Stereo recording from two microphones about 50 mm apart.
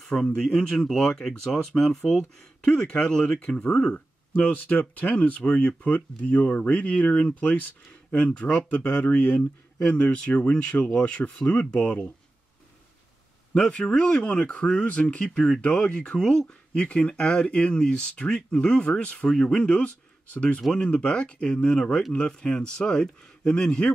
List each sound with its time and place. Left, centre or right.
0.0 s speech: centre; by 9.4 s left
10.0 s speech: left
13.6 s speech: centre
19.2 s speech: centre
19.5 s speech: left